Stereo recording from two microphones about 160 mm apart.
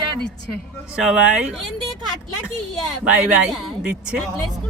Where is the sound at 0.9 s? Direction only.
5° right (ahead or behind).